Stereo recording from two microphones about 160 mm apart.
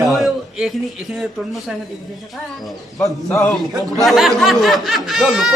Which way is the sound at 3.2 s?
20° left (ahead or behind).